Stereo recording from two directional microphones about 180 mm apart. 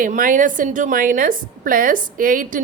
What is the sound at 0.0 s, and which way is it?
A woman's voice, 50° right (ahead or behind).